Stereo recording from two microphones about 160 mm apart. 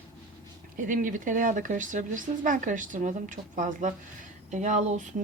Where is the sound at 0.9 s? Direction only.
55° right (ahead or behind).